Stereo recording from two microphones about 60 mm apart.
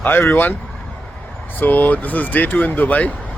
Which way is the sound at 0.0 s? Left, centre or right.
Left.